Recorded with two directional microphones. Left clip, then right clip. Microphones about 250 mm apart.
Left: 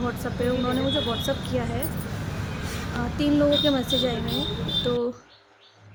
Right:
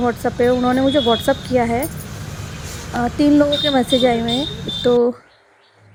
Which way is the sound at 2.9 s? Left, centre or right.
Right.